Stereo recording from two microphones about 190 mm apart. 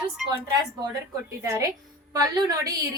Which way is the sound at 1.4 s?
15° right (ahead or behind).